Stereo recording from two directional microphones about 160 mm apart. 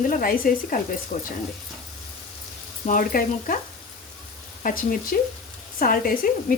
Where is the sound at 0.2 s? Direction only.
65° left (ahead or behind).